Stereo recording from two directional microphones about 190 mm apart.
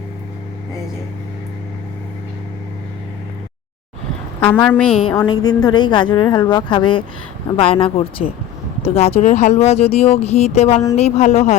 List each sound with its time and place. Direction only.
4.4 s a woman's voice: 10° left (ahead or behind)
5.1 s a woman's voice: 20° left (ahead or behind); by 11.5 s 35° left (ahead or behind)